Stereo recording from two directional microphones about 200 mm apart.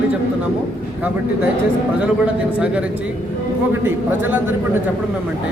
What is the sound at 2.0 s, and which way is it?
Speech, 5° right (ahead or behind).